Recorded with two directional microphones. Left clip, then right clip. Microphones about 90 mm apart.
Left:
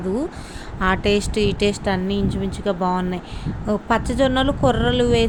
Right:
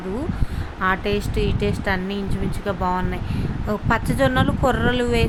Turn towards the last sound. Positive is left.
turn(degrees=50)  # may be behind; listen again after turning